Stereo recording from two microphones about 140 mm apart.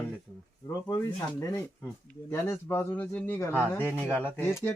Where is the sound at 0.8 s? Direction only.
30° left (ahead or behind).